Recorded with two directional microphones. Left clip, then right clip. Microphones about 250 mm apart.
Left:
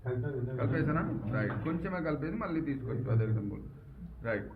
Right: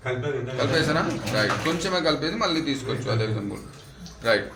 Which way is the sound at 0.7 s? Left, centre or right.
Right.